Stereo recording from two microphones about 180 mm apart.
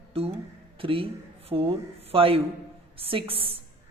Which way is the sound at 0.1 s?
30° right (ahead or behind).